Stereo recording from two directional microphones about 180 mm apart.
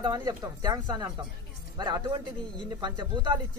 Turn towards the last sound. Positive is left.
turn(degrees=-25)  # may be behind; listen again after turning